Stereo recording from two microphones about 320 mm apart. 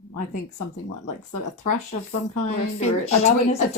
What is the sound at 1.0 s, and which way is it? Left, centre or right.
Speech, left.